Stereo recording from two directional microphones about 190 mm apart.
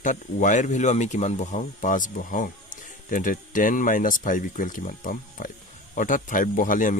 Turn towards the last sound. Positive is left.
turn(degrees=45)  # may be behind; listen again after turning